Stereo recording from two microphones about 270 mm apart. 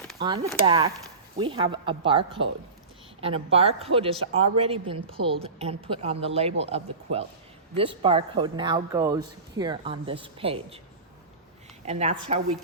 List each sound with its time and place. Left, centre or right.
0.2 s a woman's voice: centre
11.9 s a woman's voice: right